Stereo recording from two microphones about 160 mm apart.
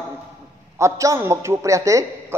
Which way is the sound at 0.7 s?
20° right (ahead or behind).